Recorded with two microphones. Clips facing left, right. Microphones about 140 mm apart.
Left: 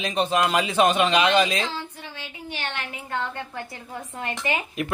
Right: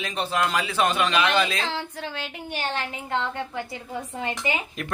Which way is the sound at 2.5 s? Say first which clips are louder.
Right 4 dB; 40° right (ahead or behind).